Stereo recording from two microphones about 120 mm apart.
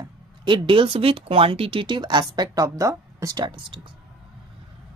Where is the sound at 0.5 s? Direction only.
45° right (ahead or behind).